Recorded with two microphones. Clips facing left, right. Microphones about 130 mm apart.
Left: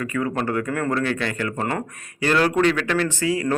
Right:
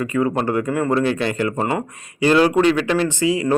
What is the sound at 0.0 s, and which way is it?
Speech, 25° right (ahead or behind).